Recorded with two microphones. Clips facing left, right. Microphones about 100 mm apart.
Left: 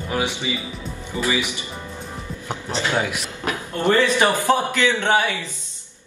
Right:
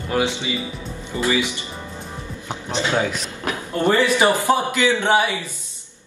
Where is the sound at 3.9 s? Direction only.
15° right (ahead or behind).